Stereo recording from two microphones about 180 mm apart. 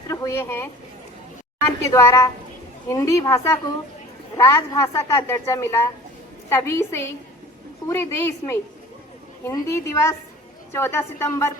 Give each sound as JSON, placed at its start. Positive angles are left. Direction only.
{"t": 0.1, "sound": "a woman's voice", "side_deg": 15}